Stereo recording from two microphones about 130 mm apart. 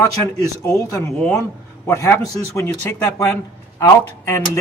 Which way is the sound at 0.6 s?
25° left (ahead or behind).